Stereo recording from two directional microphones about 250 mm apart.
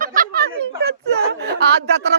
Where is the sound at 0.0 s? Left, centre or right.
Right.